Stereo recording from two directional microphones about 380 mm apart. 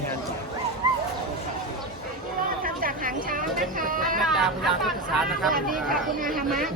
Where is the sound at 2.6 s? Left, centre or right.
Right.